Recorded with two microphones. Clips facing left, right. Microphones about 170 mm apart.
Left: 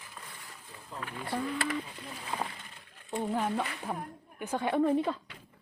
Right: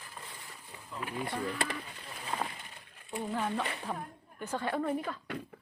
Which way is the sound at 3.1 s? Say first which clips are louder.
Left 3 dB; 10° left (ahead or behind).